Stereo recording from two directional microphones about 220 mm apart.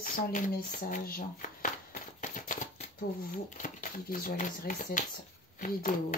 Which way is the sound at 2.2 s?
35° left (ahead or behind).